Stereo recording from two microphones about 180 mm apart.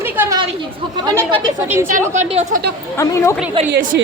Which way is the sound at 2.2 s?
35° right (ahead or behind).